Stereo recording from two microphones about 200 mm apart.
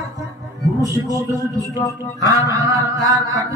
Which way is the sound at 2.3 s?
15° right (ahead or behind).